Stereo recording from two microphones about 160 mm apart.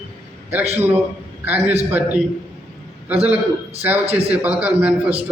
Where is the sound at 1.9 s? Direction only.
10° right (ahead or behind).